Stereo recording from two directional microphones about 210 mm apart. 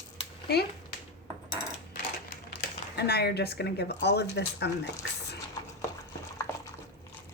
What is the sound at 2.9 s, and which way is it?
Speech, 50° left (ahead or behind).